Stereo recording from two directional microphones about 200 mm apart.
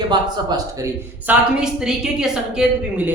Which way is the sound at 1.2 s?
5° right (ahead or behind).